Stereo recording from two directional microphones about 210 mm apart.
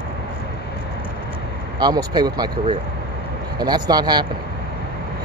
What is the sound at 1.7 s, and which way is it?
Speech, 20° right (ahead or behind).